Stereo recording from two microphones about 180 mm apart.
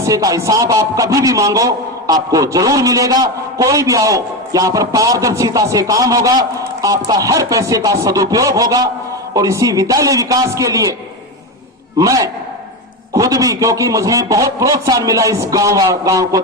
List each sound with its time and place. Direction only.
0.0 s a man's voice: 20° right (ahead or behind)
11.9 s a man's voice: 20° right (ahead or behind)